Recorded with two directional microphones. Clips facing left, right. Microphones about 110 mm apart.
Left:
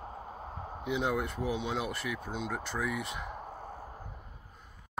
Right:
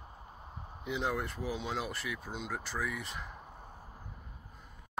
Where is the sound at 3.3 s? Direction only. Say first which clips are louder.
Left 8 dB; 90° left.